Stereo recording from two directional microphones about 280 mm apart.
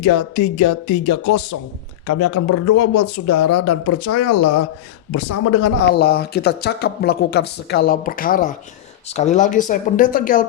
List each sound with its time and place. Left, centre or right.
0.0 s speech: left
6.0 s speech: left